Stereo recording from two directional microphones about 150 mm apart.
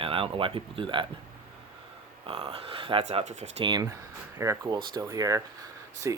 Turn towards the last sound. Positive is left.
turn(degrees=-20)  # may be behind; listen again after turning